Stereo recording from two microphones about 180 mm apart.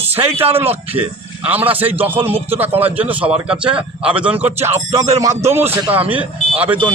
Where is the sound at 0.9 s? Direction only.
10° right (ahead or behind).